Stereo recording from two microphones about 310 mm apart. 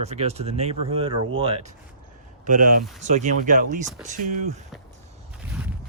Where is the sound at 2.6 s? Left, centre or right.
Right.